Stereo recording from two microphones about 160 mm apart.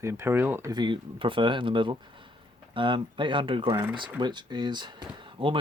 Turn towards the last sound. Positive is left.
turn(degrees=-35)  # may be behind; listen again after turning